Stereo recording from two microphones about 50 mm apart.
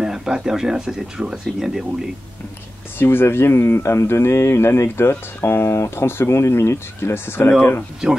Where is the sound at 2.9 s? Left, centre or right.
Left.